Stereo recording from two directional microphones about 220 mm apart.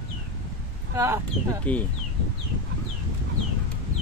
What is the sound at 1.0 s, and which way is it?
Speech, 10° right (ahead or behind).